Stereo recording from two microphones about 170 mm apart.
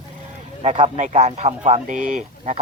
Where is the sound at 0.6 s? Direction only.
35° right (ahead or behind).